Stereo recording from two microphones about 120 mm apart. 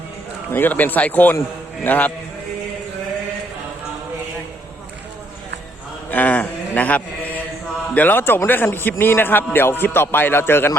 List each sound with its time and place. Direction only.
0.5 s a man's voice: 15° left (ahead or behind)
6.1 s mantra: 15° left (ahead or behind)
7.9 s a man's voice: 15° left (ahead or behind)